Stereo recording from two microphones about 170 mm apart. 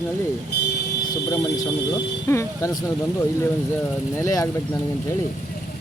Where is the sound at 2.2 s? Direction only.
15° left (ahead or behind).